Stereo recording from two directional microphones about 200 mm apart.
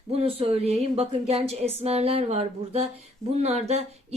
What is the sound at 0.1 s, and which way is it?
A woman's voice, 30° right (ahead or behind).